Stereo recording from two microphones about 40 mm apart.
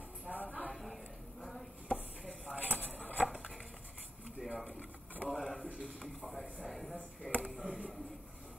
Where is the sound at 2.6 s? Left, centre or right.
Left.